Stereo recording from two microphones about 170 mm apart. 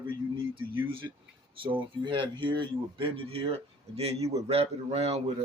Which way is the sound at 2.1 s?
30° right (ahead or behind).